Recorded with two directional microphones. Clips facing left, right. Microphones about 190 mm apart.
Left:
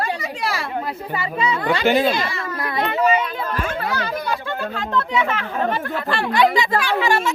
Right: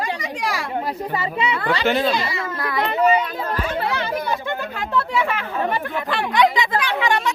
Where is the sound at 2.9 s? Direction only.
35° right (ahead or behind).